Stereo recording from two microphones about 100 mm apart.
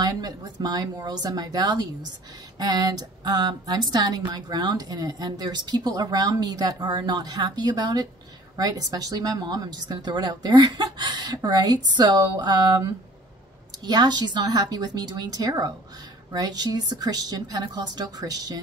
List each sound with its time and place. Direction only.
0.0 s a woman's voice: 40° right (ahead or behind)